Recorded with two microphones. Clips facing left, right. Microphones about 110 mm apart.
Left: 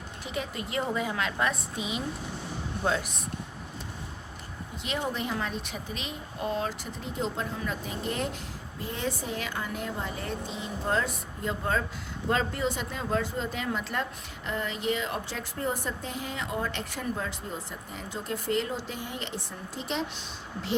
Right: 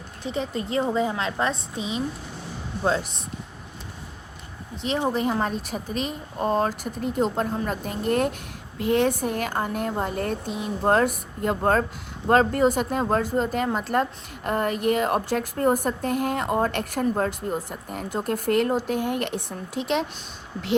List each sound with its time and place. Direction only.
0.3 s a woman's voice: 30° right (ahead or behind)
4.8 s a woman's voice: 35° right (ahead or behind); by 8.4 s 55° right (ahead or behind)
8.8 s a woman's voice: 65° right (ahead or behind)